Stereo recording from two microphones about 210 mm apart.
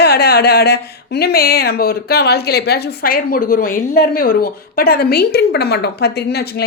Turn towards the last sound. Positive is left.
turn(degrees=50)  # may be behind; listen again after turning